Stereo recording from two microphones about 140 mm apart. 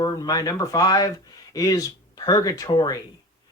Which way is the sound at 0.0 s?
25° left (ahead or behind).